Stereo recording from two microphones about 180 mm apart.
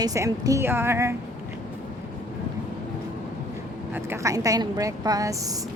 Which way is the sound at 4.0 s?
15° right (ahead or behind).